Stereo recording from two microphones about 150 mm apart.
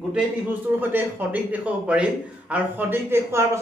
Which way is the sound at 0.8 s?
10° right (ahead or behind).